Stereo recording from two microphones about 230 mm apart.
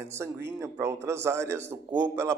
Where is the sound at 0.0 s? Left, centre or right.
Centre.